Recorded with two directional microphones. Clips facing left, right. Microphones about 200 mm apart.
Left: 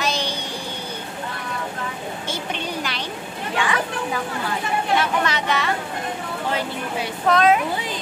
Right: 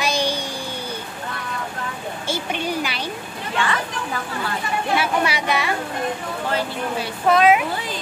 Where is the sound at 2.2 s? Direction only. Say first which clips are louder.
Right 5 dB; 10° right (ahead or behind).